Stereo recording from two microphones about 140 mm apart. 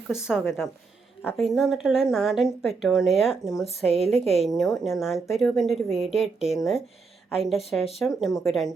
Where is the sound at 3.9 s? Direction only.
45° left (ahead or behind).